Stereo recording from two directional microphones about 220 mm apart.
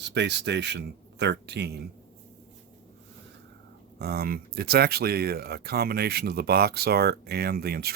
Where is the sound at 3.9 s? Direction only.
45° right (ahead or behind).